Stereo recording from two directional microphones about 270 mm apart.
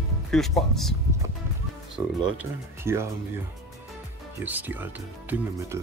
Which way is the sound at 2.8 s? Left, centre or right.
Centre.